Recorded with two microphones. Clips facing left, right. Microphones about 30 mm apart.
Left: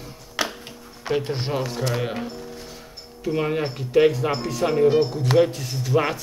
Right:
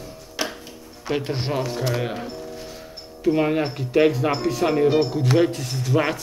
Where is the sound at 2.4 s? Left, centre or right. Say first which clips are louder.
Right 2 dB; centre.